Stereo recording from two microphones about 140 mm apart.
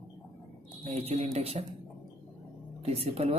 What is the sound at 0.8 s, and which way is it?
Speech, 45° right (ahead or behind).